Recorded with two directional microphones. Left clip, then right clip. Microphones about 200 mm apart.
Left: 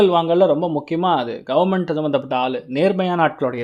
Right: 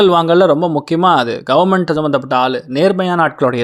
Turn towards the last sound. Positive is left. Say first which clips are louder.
# right 5 dB
turn(degrees=-15)  # may be behind; listen again after turning